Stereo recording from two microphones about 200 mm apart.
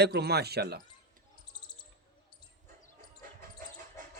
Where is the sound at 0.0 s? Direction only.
55° right (ahead or behind).